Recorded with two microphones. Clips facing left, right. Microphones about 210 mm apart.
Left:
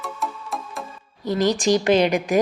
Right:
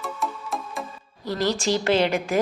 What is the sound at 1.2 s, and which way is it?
A woman's voice, 15° left (ahead or behind).